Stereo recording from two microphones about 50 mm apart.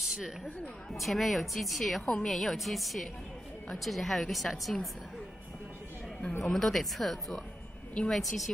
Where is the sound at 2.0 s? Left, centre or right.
Centre.